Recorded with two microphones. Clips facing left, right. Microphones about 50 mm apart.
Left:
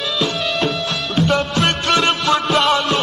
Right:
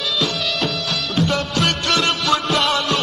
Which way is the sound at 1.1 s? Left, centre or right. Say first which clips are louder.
Left 3 dB; centre.